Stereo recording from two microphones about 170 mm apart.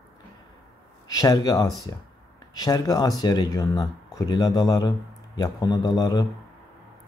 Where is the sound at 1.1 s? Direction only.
20° left (ahead or behind).